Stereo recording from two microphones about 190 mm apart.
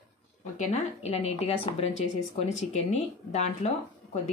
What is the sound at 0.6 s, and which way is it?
A woman's voice, 35° left (ahead or behind).